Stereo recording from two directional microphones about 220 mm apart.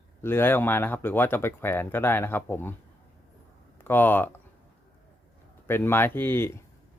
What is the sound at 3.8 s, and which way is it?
Speech, 10° left (ahead or behind).